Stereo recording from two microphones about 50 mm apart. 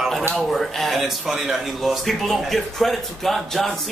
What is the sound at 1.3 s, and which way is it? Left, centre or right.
Speech, centre.